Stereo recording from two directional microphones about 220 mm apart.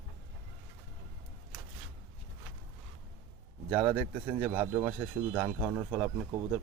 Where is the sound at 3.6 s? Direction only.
5° right (ahead or behind).